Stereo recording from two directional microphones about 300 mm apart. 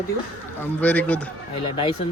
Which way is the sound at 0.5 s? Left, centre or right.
Centre.